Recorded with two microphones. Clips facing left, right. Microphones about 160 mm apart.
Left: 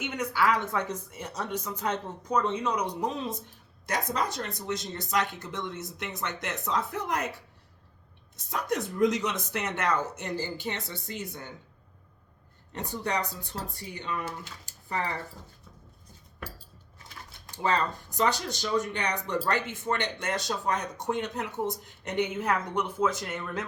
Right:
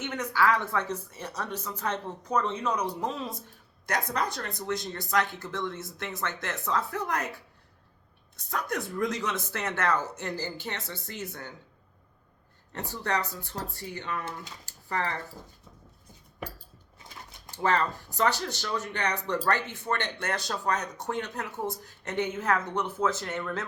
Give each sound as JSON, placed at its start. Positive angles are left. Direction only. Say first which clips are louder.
{"t": 0.0, "sound": "speech", "louder": "right 1 dB", "side_deg": 15}
{"t": 8.4, "sound": "speech", "louder": "left 2 dB", "side_deg": 20}
{"t": 12.7, "sound": "speech", "louder": "even", "side_deg": 15}
{"t": 14.6, "sound": "a sound", "louder": "right 1 dB", "side_deg": 15}
{"t": 17.6, "sound": "speech", "louder": "right 1 dB", "side_deg": 15}